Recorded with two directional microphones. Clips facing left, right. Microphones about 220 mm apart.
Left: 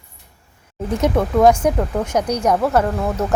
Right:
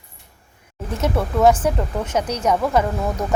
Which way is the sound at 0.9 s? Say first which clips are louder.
Left 4 dB; 15° left (ahead or behind).